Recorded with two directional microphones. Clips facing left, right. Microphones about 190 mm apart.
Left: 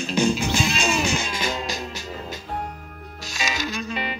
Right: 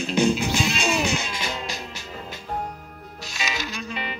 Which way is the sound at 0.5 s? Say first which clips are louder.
Even; 45° left (ahead or behind).